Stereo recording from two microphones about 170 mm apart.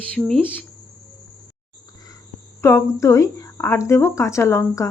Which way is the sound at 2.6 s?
15° left (ahead or behind).